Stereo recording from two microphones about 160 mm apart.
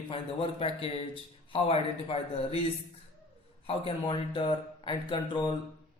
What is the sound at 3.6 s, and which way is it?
Speech, 30° left (ahead or behind).